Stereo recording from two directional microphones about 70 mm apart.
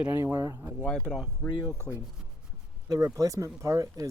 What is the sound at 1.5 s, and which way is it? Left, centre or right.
Speech, left.